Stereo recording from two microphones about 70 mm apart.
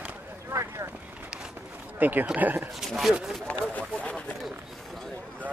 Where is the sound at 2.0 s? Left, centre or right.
Right.